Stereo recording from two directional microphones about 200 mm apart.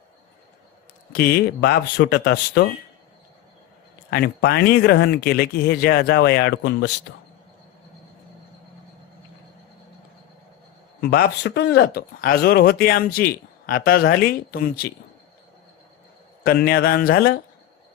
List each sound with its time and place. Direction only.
1.1 s speech: 50° left (ahead or behind)
4.1 s speech: 50° left (ahead or behind)
11.1 s speech: 55° left (ahead or behind)
16.5 s speech: 50° left (ahead or behind)